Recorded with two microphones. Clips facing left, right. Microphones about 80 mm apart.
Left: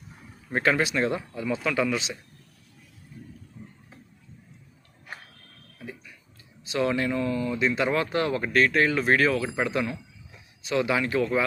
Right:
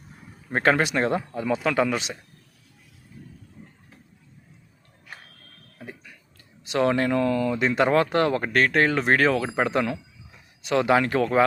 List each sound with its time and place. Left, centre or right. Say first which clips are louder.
0.5 s speech: right 3 dB; right
1.0 s speech: right 3 dB; right
3.1 s vehicle: left 1 dB; centre
5.8 s a sound: even; right
6.6 s speech: right 4 dB; right
7.6 s speech: right 4 dB; right